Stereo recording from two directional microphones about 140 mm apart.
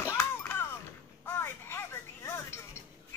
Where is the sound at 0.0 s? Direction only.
15° left (ahead or behind).